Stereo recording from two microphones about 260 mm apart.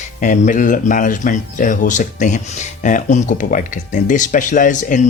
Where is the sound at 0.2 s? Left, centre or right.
Left.